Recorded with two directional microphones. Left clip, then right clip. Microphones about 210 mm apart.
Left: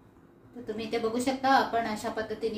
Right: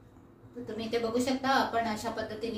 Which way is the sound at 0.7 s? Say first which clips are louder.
Even; 40° left (ahead or behind).